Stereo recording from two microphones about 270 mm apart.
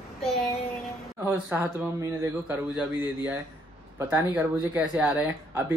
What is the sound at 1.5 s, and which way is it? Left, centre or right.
Speech, centre.